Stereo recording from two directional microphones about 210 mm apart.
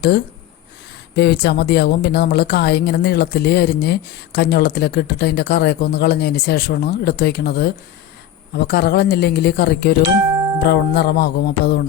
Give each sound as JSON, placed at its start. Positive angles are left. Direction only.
{"t": 1.1, "sound": "a woman's voice", "side_deg": 50}